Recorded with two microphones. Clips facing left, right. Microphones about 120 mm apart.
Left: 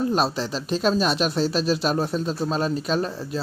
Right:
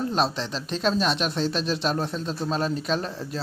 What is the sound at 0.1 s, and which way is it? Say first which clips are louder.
Speech: left 2 dB; 5° left (ahead or behind).